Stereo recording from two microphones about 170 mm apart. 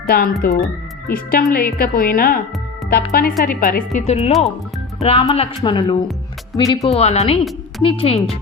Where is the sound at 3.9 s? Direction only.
40° left (ahead or behind).